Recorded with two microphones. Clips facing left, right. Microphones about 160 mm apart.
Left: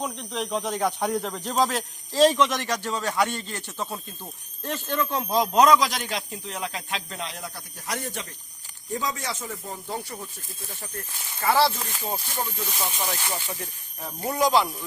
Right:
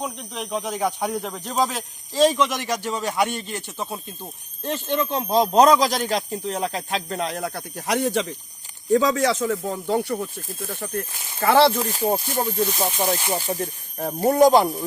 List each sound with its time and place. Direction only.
0.0 s speech: 5° right (ahead or behind); by 11.8 s 60° right (ahead or behind)
11.8 s speech: 40° right (ahead or behind)